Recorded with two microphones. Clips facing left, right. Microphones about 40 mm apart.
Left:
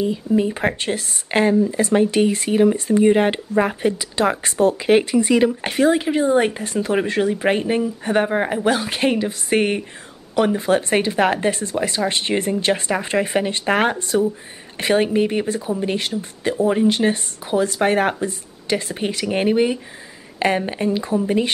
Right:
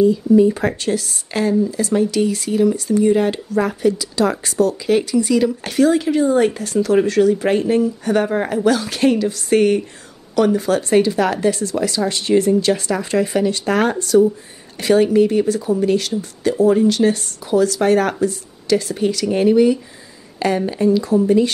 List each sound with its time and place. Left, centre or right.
0.0 s speech: left